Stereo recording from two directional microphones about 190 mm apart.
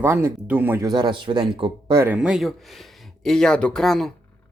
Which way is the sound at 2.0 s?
5° right (ahead or behind).